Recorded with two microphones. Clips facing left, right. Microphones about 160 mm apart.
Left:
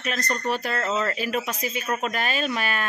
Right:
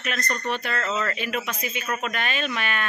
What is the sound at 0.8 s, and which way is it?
Speech, 25° left (ahead or behind).